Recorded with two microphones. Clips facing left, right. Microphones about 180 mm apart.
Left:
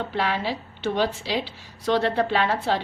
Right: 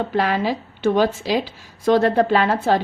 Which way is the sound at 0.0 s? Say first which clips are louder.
Right 6 dB; 45° right (ahead or behind).